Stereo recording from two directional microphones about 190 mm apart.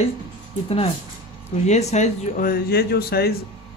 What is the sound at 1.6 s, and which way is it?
Speech, 35° left (ahead or behind).